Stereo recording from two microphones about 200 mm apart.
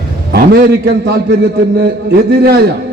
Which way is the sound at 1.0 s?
55° right (ahead or behind).